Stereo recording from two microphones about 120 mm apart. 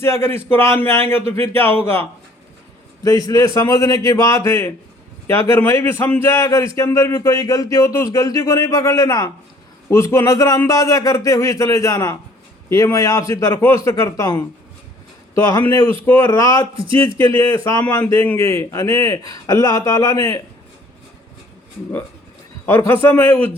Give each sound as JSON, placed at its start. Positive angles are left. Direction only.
{"t": 0.0, "sound": "a man's voice", "side_deg": 20}
{"t": 22.9, "sound": "a man's voice", "side_deg": 20}